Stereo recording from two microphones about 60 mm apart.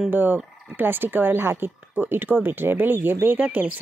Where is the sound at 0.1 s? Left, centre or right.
Right.